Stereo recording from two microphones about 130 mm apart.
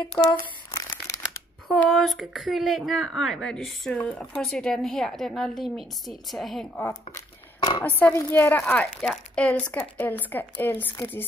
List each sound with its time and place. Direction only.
0.7 s crumpling: 25° left (ahead or behind)
1.7 s a woman's voice: centre (ahead or behind)
6.9 s a sound: 30° left (ahead or behind)
7.8 s a woman's voice: 10° left (ahead or behind)